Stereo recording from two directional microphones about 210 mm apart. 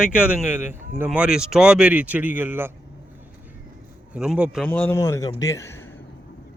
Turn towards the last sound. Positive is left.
turn(degrees=15)  # may be behind; listen again after turning